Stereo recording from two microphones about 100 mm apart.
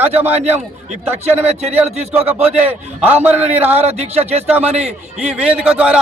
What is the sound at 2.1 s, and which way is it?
Speech, 20° right (ahead or behind).